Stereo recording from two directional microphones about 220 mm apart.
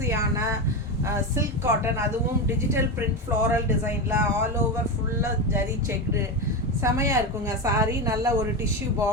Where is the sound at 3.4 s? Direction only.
10° right (ahead or behind).